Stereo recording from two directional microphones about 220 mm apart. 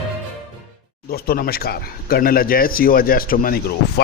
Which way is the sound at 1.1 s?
45° left (ahead or behind).